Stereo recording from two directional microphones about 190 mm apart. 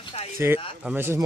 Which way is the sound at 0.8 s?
10° right (ahead or behind).